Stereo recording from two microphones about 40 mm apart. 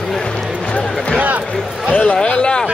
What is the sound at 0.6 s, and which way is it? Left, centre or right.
Speech, left.